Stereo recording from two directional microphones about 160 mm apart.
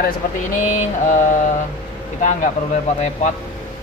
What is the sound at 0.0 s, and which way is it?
Speech, 50° left (ahead or behind).